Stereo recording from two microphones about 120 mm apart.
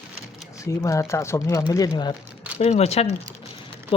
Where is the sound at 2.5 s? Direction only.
65° left (ahead or behind).